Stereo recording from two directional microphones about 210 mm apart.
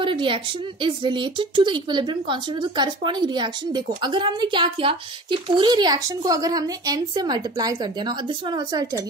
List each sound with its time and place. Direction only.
0.0 s speech: 25° right (ahead or behind)